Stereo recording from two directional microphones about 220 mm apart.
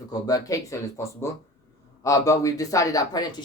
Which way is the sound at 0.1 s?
15° left (ahead or behind).